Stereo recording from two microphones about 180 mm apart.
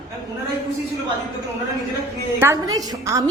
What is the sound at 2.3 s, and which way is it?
Speech, 15° right (ahead or behind).